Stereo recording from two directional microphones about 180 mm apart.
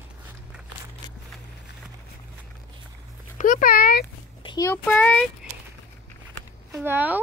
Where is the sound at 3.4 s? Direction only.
50° left (ahead or behind).